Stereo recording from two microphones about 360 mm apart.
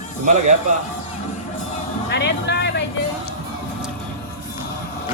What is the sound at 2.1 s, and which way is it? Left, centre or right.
Vehicle, left.